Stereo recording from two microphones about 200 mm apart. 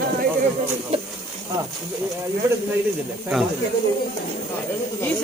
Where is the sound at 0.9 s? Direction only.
30° right (ahead or behind).